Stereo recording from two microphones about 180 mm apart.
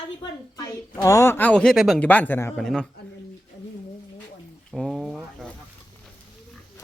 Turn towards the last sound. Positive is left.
turn(degrees=0)  # may be behind; listen again after turning